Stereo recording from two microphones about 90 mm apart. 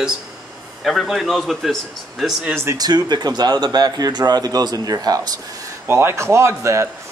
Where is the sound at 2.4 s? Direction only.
25° right (ahead or behind).